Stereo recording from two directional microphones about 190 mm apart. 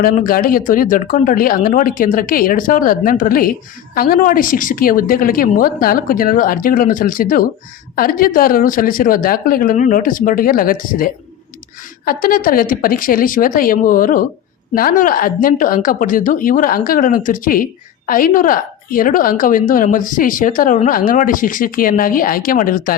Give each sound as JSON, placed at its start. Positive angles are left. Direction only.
{"t": 0.0, "sound": "a woman's voice", "side_deg": 50}